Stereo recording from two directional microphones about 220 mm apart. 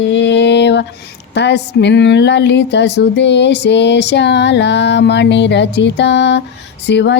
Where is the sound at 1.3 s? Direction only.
50° left (ahead or behind).